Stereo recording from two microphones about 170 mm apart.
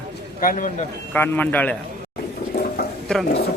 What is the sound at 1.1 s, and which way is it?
Speech, 10° left (ahead or behind).